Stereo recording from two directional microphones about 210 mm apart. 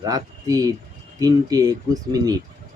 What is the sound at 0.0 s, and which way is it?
Speech, 15° right (ahead or behind).